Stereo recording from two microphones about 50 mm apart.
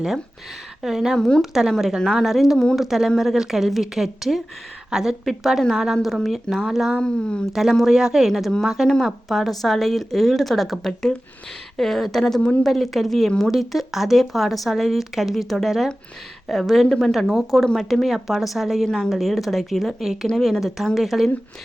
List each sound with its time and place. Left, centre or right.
0.8 s speech: centre
2.0 s a woman's voice: centre
7.0 s speech: centre
7.5 s speech: centre
8.3 s speech: centre